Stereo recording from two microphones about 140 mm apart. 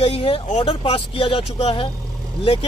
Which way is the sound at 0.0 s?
45° left (ahead or behind).